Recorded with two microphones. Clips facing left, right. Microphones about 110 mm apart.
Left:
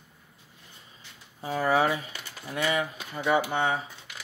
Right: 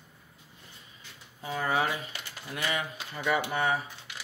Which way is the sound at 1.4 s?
35° left (ahead or behind).